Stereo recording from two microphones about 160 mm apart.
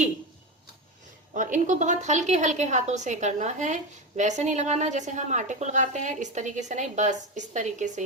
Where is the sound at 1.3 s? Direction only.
50° right (ahead or behind).